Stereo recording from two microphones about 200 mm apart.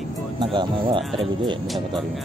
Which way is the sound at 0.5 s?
25° right (ahead or behind).